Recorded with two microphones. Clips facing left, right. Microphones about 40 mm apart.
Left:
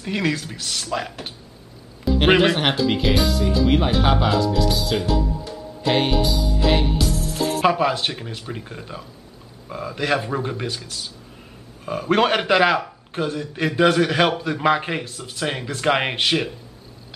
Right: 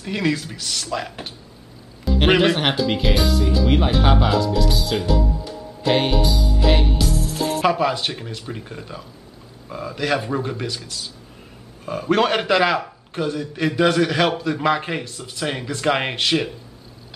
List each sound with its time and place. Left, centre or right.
0.0 s a man's voice: centre